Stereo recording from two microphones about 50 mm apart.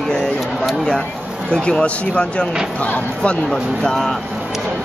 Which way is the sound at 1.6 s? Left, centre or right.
Left.